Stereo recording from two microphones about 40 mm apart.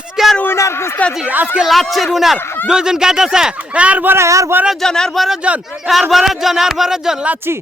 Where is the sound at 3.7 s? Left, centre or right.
Right.